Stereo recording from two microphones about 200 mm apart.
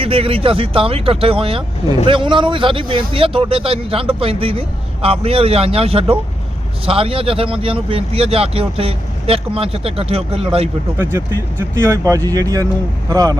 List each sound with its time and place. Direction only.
0.0 s speech: 30° right (ahead or behind)
10.9 s speech: 10° right (ahead or behind)